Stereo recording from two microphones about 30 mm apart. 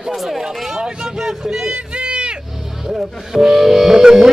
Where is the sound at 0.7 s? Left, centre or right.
Right.